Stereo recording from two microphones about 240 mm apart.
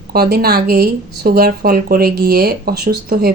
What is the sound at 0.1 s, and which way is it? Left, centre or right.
Speech, right.